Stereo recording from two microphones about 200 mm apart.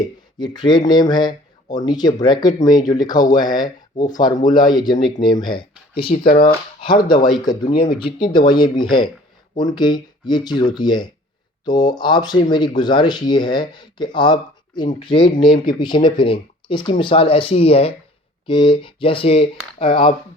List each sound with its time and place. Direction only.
0.3 s speech: 20° left (ahead or behind)
6.2 s speech: 45° left (ahead or behind)
6.8 s speech: 25° left (ahead or behind)
7.6 s speech: 45° left (ahead or behind)
8.3 s speech: 20° left (ahead or behind)